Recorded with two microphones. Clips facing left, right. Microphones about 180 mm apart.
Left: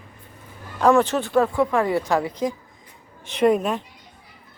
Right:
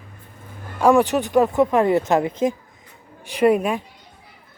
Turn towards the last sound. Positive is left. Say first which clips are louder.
# right 2 dB
turn(degrees=-10)  # may be behind; listen again after turning